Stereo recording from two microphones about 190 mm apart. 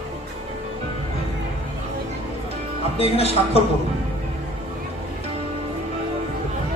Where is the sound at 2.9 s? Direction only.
30° left (ahead or behind).